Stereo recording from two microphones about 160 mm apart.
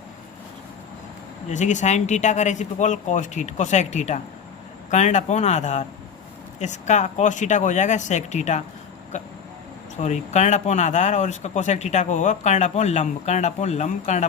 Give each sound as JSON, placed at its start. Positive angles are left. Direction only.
{"t": 1.5, "sound": "speech", "side_deg": 50}
{"t": 10.0, "sound": "speech", "side_deg": 45}